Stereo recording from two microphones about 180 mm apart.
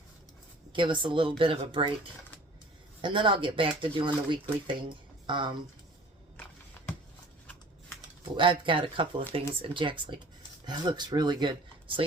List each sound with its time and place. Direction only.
0.7 s speech: 25° right (ahead or behind)
3.0 s speech: 25° right (ahead or behind)
8.2 s speech: 25° right (ahead or behind)